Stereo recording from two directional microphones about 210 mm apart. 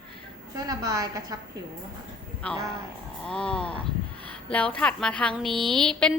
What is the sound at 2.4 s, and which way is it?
A woman's voice, 5° left (ahead or behind).